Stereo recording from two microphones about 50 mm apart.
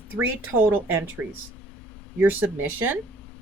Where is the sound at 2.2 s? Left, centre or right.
Right.